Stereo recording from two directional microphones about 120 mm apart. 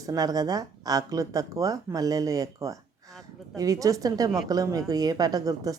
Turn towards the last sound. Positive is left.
turn(degrees=-30)  # may be behind; listen again after turning